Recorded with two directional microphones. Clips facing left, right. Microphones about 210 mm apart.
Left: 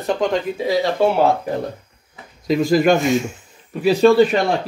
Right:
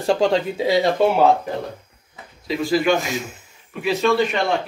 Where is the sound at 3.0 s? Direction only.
Centre (ahead or behind).